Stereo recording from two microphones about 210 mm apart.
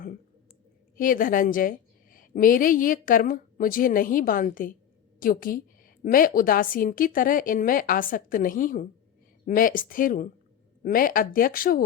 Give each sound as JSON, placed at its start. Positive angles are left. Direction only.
{"t": 0.9, "sound": "a woman's voice", "side_deg": 40}